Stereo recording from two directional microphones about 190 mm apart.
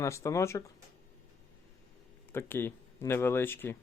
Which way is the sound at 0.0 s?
15° left (ahead or behind).